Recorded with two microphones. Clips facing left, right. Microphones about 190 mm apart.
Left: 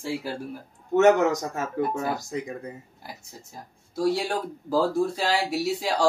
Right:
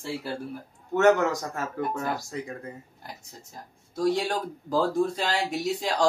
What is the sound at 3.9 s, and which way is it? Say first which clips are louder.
Speech: left 1 dB; 10° left (ahead or behind).